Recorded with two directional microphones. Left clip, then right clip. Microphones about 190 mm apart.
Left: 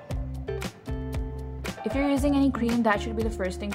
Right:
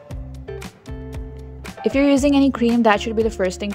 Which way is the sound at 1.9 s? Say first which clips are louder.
Right 9 dB; 35° right (ahead or behind).